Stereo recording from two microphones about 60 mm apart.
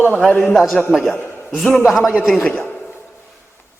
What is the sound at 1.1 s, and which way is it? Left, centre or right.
Speech, centre.